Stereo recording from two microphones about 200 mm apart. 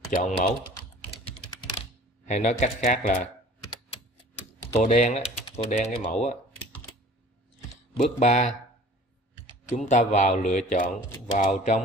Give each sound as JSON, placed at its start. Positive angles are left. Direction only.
{"t": 0.1, "sound": "speech", "side_deg": 40}
{"t": 1.2, "sound": "typing", "side_deg": 30}
{"t": 4.7, "sound": "speech", "side_deg": 35}
{"t": 8.0, "sound": "speech", "side_deg": 35}
{"t": 9.8, "sound": "speech", "side_deg": 35}